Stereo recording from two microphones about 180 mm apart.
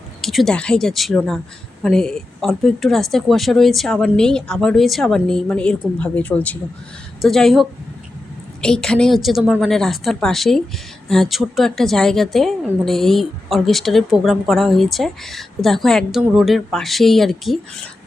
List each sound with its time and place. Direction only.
0.2 s a woman's voice: centre (ahead or behind)